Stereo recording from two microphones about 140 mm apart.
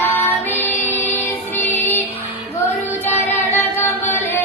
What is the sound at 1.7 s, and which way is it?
Music, 15° left (ahead or behind).